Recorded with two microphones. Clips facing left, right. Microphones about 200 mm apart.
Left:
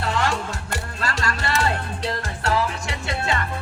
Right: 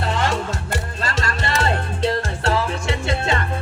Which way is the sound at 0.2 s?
20° right (ahead or behind).